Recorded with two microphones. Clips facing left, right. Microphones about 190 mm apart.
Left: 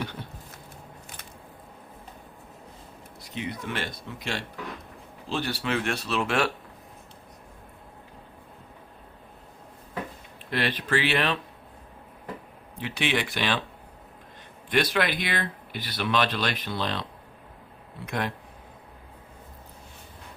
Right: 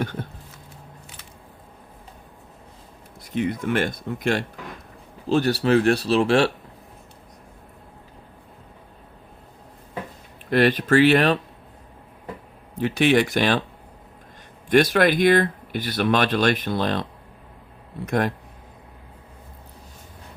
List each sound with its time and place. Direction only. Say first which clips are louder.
0.0 s speech: right 6 dB; 50° right (ahead or behind)
3.3 s speech: right 10 dB; 50° right (ahead or behind); by 6.5 s 30° right (ahead or behind)
10.5 s speech: right 9 dB; 45° right (ahead or behind)
12.8 s speech: right 10 dB; 45° right (ahead or behind)
14.7 s speech: right 8 dB; 45° right (ahead or behind)